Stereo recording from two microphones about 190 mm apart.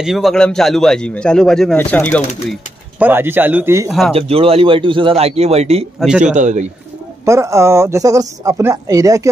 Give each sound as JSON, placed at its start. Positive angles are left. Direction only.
{"t": 0.0, "sound": "a man's voice", "side_deg": 0}
{"t": 3.0, "sound": "speech", "side_deg": -10}
{"t": 4.1, "sound": "a man's voice", "side_deg": -30}
{"t": 5.9, "sound": "a man's voice", "side_deg": -5}
{"t": 6.3, "sound": "a man's voice", "side_deg": -40}
{"t": 7.2, "sound": "speech", "side_deg": -15}